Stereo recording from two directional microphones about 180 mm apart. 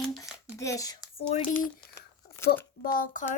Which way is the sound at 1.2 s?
40° left (ahead or behind).